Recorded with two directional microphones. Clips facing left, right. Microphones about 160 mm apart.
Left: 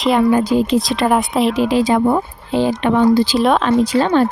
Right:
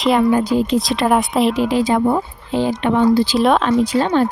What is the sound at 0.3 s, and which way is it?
Speech, 90° left.